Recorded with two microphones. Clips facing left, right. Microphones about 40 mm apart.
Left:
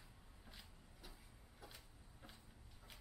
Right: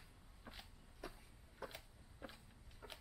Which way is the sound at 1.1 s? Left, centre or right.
Right.